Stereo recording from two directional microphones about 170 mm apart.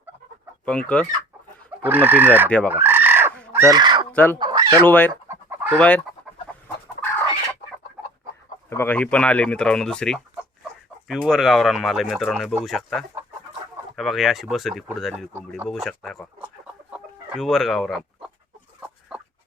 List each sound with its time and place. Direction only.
0.6 s speech: 5° left (ahead or behind)
1.8 s fowl: 10° right (ahead or behind)
3.5 s crow: 15° right (ahead or behind)
4.1 s chicken: 10° left (ahead or behind)
4.4 s chicken: 25° right (ahead or behind)
4.9 s speech: 10° left (ahead or behind)
8.7 s speech: 10° left (ahead or behind)
15.3 s fowl: 10° right (ahead or behind)
15.7 s speech: centre (ahead or behind)
16.9 s chicken: centre (ahead or behind)
19.1 s rodents: 5° right (ahead or behind)